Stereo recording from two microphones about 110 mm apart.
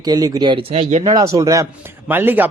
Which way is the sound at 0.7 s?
75° right (ahead or behind).